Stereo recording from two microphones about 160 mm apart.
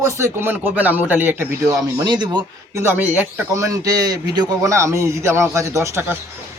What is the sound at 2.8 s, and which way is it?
Speech, 10° right (ahead or behind).